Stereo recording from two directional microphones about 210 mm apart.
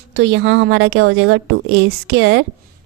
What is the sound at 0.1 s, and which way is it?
A woman's voice, 60° right (ahead or behind).